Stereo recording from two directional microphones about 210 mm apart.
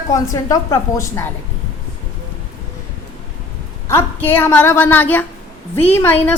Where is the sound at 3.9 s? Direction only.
10° left (ahead or behind).